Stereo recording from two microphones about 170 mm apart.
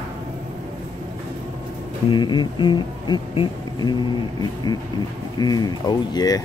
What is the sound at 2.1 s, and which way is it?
Speech, 25° left (ahead or behind).